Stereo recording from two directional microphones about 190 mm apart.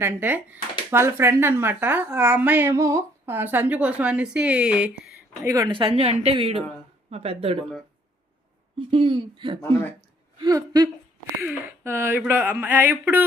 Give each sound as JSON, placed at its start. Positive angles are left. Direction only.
{"t": 0.0, "sound": "speech", "side_deg": -10}
{"t": 5.5, "sound": "a woman's voice", "side_deg": -20}
{"t": 8.9, "sound": "a woman's voice", "side_deg": -25}